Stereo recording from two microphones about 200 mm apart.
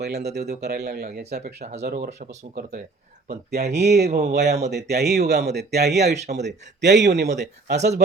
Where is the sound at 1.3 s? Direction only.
35° right (ahead or behind).